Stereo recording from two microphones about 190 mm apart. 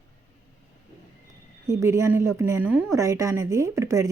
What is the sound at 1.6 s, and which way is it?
Speech, 15° right (ahead or behind).